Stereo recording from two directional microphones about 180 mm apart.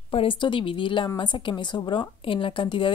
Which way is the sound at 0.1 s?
30° left (ahead or behind).